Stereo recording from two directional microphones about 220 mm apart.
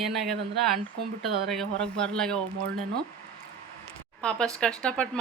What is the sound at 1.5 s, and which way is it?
Speech, 5° left (ahead or behind).